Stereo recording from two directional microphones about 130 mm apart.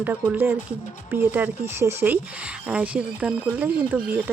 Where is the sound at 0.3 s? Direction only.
15° right (ahead or behind).